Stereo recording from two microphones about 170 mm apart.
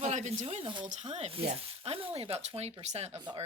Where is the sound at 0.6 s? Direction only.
30° right (ahead or behind).